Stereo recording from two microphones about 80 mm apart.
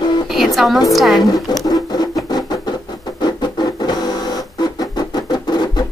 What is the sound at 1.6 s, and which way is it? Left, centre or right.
Music, left.